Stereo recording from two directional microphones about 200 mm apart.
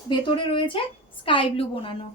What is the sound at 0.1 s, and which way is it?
Speech, 25° left (ahead or behind).